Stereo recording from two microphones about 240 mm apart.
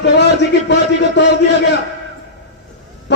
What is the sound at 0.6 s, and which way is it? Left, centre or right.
A man's voice, left.